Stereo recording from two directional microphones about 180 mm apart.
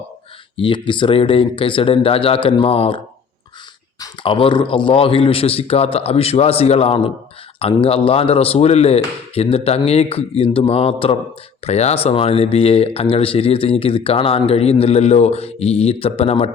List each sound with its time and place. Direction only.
0.5 s speech: 30° left (ahead or behind)
4.0 s speech: 30° left (ahead or behind)